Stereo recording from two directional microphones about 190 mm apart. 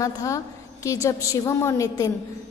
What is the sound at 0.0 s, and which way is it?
A woman's voice, 15° left (ahead or behind).